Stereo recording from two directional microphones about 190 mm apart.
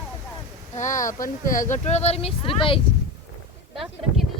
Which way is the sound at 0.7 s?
40° left (ahead or behind).